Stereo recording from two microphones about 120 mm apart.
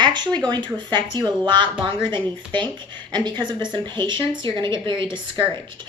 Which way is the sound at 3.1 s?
35° right (ahead or behind).